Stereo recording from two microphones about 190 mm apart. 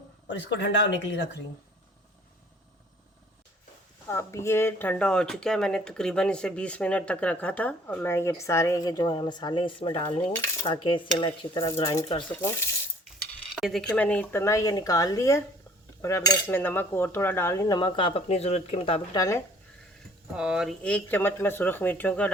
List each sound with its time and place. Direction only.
0.3 s speech: 70° left (ahead or behind)
4.0 s speech: 15° left (ahead or behind)
10.4 s cutlery: 15° left (ahead or behind)
10.8 s cutlery: 25° left (ahead or behind)
13.6 s speech: centre (ahead or behind); by 15.4 s 15° left (ahead or behind)
16.0 s cutlery: 15° left (ahead or behind)
20.3 s speech: 5° right (ahead or behind)